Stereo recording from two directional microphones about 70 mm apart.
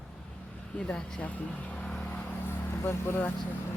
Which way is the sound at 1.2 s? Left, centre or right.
Left.